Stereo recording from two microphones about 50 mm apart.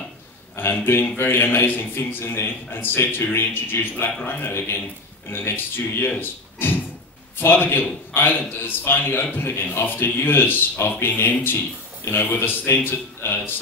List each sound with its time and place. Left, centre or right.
0.6 s a man's voice: left